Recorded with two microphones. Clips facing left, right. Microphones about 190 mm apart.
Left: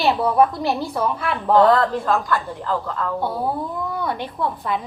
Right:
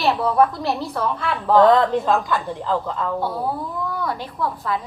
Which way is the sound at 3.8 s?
25° left (ahead or behind).